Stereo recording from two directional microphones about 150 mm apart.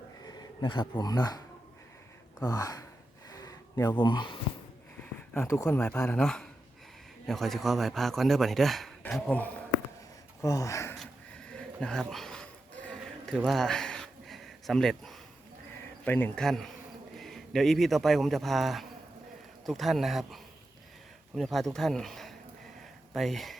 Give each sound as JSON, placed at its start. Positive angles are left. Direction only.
{"t": 0.3, "sound": "speech", "side_deg": 30}
{"t": 2.4, "sound": "speech", "side_deg": 25}
{"t": 3.2, "sound": "a sound", "side_deg": 25}
{"t": 5.3, "sound": "speech", "side_deg": 20}
{"t": 10.4, "sound": "speech", "side_deg": 20}
{"t": 10.9, "sound": "a sound", "side_deg": 5}
{"t": 16.0, "sound": "speech", "side_deg": 10}